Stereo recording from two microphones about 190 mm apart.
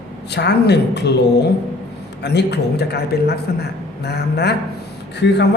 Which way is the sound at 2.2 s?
65° left (ahead or behind).